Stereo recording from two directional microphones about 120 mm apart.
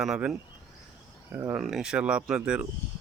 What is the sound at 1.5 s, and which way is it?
Speech, 5° right (ahead or behind).